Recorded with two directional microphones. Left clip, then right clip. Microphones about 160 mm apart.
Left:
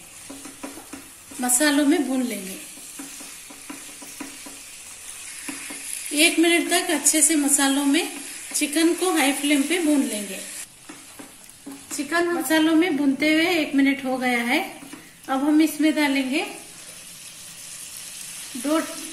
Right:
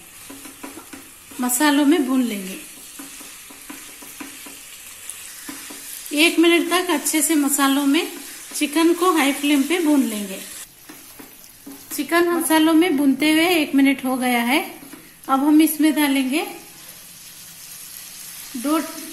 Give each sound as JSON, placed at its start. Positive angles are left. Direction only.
{"t": 1.4, "sound": "a woman's voice", "side_deg": -55}
{"t": 6.1, "sound": "a woman's voice", "side_deg": -50}
{"t": 12.1, "sound": "a woman's voice", "side_deg": -55}